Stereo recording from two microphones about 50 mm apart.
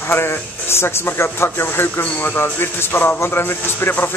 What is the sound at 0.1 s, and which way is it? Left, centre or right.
Speech, left.